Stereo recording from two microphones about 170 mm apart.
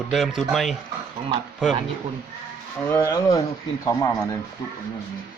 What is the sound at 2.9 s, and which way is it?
Speech, 15° left (ahead or behind).